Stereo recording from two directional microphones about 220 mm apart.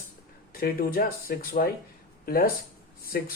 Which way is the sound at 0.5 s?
40° left (ahead or behind).